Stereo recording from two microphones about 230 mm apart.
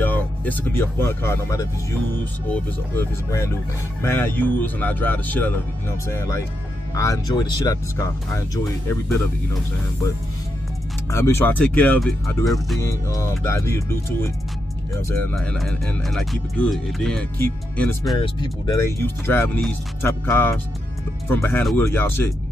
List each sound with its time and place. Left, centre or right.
0.0 s speech: centre
11.1 s speech: centre
12.8 s speech: centre